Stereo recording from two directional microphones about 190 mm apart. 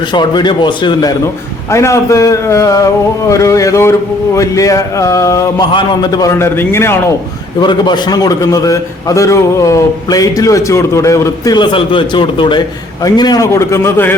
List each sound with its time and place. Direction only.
0.1 s a man's voice: 25° left (ahead or behind)
7.6 s a man's voice: 25° left (ahead or behind)